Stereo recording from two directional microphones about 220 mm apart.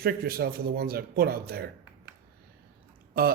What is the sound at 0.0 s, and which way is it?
Mantra, 45° right (ahead or behind).